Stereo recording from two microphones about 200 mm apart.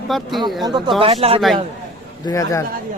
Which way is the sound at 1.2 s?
30° right (ahead or behind).